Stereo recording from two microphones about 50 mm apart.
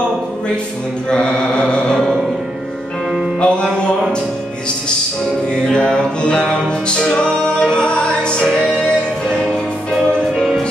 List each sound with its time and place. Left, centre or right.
1.1 s mantra: centre
3.3 s music: centre
5.7 s music: centre
10.3 s music: centre